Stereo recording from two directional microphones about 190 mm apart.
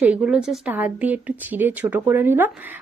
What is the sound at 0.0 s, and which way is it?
A woman's voice, 5° right (ahead or behind).